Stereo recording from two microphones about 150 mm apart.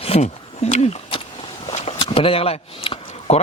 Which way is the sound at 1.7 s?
40° left (ahead or behind).